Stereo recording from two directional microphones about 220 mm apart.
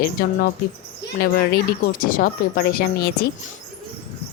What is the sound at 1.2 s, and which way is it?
Speech, 45° left (ahead or behind).